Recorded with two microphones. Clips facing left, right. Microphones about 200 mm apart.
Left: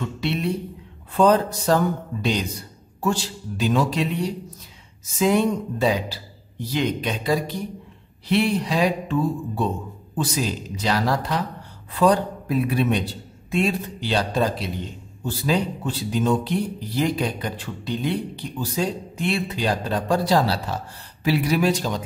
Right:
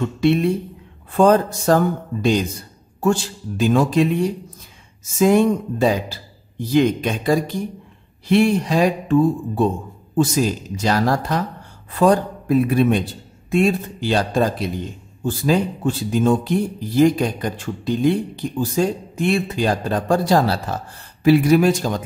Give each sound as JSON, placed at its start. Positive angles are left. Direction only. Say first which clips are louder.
{"t": 0.2, "sound": "speech", "louder": "right 9 dB", "side_deg": -50}